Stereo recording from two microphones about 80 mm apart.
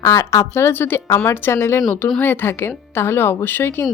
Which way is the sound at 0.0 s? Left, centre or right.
Left.